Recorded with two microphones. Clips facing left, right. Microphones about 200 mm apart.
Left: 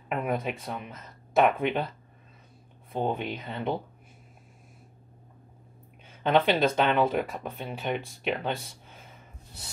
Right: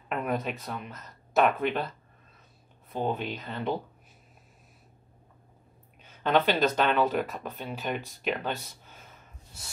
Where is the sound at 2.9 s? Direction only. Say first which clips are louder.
Left 1 dB; 10° left (ahead or behind).